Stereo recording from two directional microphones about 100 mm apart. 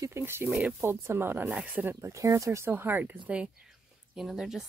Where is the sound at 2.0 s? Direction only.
30° right (ahead or behind).